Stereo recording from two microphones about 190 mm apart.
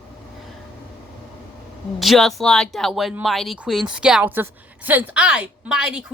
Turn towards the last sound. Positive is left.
turn(degrees=-5)  # may be behind; listen again after turning